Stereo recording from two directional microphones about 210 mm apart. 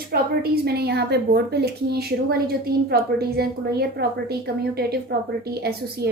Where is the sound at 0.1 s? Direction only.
50° right (ahead or behind).